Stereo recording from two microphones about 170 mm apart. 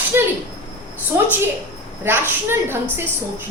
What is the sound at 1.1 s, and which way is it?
A woman's voice, 15° right (ahead or behind).